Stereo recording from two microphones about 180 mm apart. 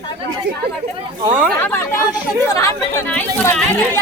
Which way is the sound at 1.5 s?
10° left (ahead or behind).